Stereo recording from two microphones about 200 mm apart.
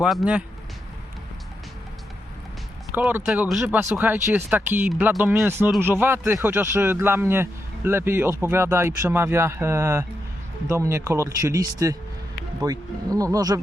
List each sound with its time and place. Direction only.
0.0 s speech: centre (ahead or behind)
2.9 s speech: 10° right (ahead or behind)